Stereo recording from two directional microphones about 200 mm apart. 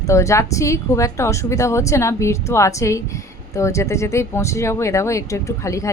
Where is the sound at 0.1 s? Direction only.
15° left (ahead or behind).